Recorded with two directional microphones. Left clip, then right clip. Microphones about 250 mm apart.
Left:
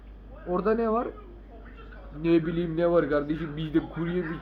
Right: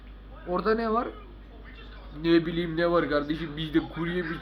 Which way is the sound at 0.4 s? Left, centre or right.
Centre.